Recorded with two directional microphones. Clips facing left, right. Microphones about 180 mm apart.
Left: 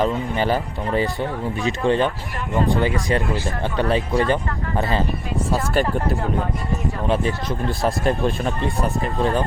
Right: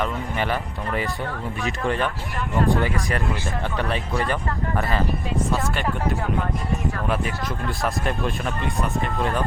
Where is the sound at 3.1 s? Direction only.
25° left (ahead or behind).